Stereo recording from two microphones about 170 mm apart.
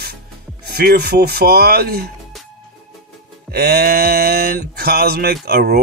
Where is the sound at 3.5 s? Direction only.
70° right (ahead or behind).